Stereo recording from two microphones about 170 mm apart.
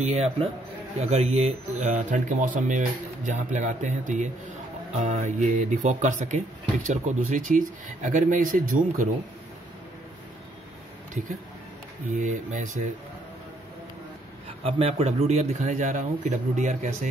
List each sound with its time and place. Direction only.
0.0 s speech: 40° right (ahead or behind)
12.1 s speech: 45° right (ahead or behind)
14.6 s speech: 35° right (ahead or behind)